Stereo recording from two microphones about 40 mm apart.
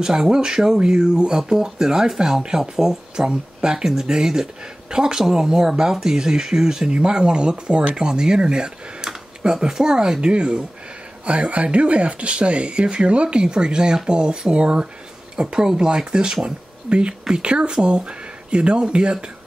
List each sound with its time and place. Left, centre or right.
0.0 s speech: centre
1.4 s speech: centre